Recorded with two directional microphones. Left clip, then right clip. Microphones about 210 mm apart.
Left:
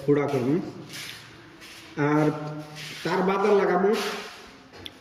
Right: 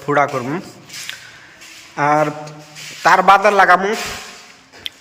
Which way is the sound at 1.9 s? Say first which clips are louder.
Right 9 dB; 5° left (ahead or behind).